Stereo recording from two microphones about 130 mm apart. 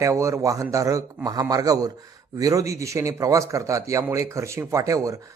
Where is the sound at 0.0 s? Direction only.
25° right (ahead or behind).